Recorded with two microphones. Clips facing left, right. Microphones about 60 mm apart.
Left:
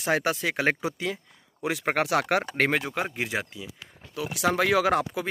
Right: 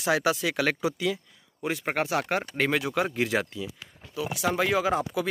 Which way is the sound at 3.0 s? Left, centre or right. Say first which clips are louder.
Right 3 dB; centre.